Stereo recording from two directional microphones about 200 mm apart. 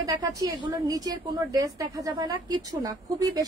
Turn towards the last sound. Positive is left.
turn(degrees=-20)  # may be behind; listen again after turning